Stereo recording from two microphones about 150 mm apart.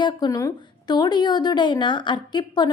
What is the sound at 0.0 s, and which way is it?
A woman's voice, 30° left (ahead or behind).